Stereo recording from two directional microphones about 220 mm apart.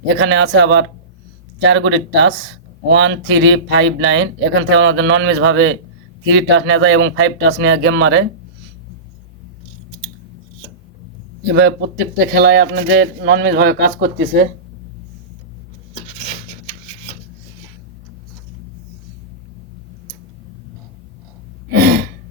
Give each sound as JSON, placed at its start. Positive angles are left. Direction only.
{"t": 0.0, "sound": "speech", "side_deg": -55}
{"t": 11.4, "sound": "speech", "side_deg": -50}
{"t": 21.7, "sound": "gasp", "side_deg": -45}